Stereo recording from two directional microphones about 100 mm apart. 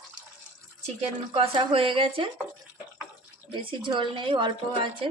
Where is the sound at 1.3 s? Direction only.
70° right (ahead or behind).